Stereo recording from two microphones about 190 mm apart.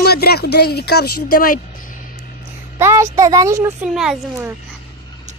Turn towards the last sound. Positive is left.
turn(degrees=-5)  # may be behind; listen again after turning